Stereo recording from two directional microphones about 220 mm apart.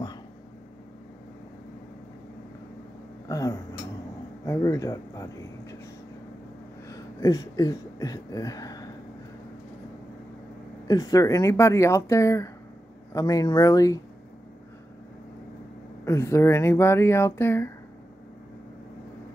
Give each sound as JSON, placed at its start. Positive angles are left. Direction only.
{"t": 3.3, "sound": "speech", "side_deg": 15}
{"t": 6.9, "sound": "a sound", "side_deg": 15}
{"t": 10.9, "sound": "speech", "side_deg": 15}
{"t": 16.1, "sound": "speech", "side_deg": 10}